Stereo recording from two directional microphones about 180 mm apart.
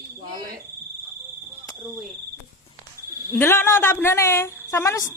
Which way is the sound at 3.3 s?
10° left (ahead or behind).